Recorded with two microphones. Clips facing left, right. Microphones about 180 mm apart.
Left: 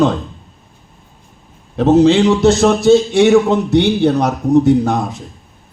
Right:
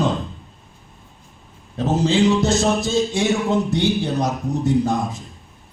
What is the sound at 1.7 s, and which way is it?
A man's voice, 70° left (ahead or behind).